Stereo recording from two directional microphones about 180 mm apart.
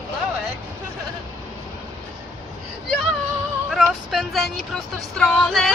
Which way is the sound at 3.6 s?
Centre (ahead or behind).